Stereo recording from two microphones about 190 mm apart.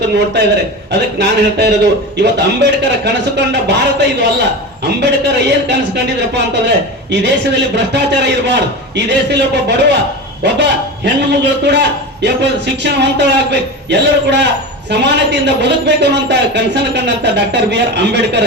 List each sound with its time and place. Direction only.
0.9 s a man's voice: 65° right (ahead or behind)